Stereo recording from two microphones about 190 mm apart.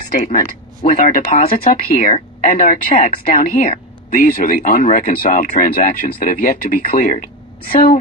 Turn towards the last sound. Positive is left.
turn(degrees=50)  # may be behind; listen again after turning